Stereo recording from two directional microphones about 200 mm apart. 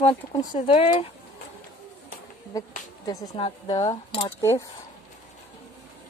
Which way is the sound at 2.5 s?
20° left (ahead or behind).